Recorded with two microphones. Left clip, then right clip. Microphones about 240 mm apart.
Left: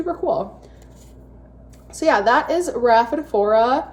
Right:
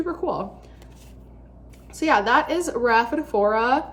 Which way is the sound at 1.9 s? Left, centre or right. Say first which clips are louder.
Left 3 dB; right.